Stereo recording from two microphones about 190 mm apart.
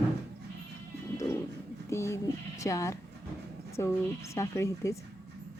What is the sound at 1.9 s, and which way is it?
Speech, 15° left (ahead or behind).